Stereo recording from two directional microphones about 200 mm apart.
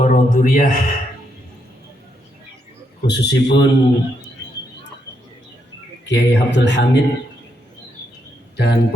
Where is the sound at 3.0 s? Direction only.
55° left (ahead or behind).